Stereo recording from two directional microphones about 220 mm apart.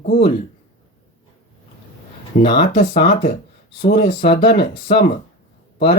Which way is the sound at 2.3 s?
35° left (ahead or behind).